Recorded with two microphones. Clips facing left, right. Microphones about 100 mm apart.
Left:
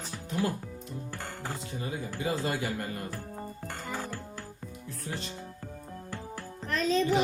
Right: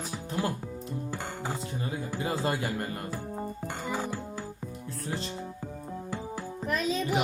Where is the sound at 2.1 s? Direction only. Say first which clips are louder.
Right 1 dB; 25° right (ahead or behind).